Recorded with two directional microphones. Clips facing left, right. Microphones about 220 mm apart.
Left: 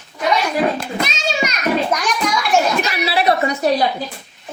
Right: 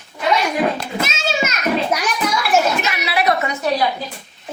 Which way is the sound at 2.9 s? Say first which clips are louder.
Left 2 dB; 30° left (ahead or behind).